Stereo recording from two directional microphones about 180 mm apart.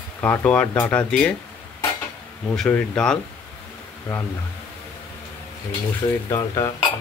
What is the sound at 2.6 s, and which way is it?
Speech, 5° left (ahead or behind).